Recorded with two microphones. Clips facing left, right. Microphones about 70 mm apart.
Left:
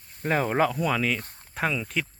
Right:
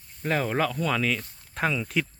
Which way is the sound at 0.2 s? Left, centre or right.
Centre.